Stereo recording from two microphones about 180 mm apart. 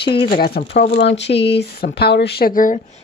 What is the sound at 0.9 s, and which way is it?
Speech, 75° left (ahead or behind).